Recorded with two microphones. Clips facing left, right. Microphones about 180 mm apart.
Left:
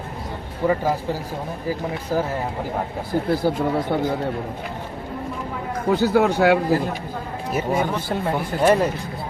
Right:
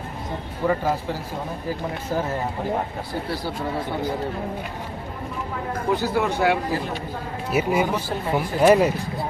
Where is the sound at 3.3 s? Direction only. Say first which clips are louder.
Left 9 dB; 50° left (ahead or behind).